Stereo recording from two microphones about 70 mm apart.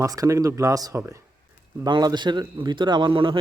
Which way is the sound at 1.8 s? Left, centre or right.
Right.